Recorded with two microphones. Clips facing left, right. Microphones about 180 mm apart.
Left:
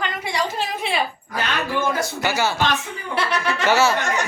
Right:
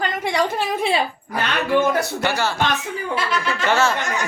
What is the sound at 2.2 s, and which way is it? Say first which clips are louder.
Speech: left 4 dB; 5° left (ahead or behind).